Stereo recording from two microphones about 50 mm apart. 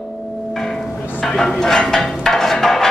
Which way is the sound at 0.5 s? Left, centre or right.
Centre.